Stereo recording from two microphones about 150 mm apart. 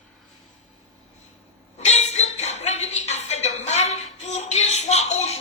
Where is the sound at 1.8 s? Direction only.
50° left (ahead or behind).